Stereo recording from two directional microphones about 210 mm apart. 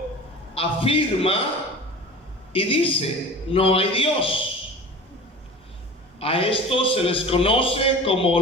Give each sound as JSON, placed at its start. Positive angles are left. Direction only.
{"t": 0.5, "sound": "a man's voice", "side_deg": 25}
{"t": 2.5, "sound": "a man's voice", "side_deg": 25}
{"t": 6.1, "sound": "a man's voice", "side_deg": 25}